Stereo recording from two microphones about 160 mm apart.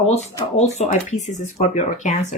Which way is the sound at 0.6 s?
45° left (ahead or behind).